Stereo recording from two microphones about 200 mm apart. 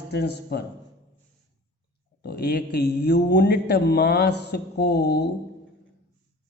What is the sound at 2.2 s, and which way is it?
Speech, 55° left (ahead or behind).